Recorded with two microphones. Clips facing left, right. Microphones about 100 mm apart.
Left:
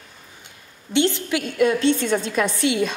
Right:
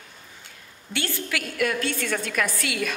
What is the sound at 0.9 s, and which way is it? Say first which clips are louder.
A woman's voice: left 9 dB; 20° left (ahead or behind).